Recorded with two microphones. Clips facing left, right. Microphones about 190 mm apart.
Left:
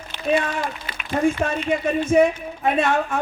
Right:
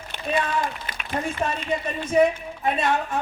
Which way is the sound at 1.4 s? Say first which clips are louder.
Left 4 dB; 50° left (ahead or behind).